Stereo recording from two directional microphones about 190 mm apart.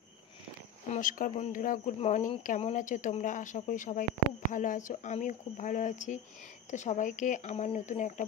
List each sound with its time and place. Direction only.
0.9 s speech: 45° left (ahead or behind)